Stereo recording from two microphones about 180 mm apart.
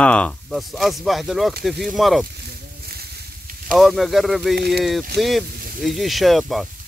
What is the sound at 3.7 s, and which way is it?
Speech, centre (ahead or behind).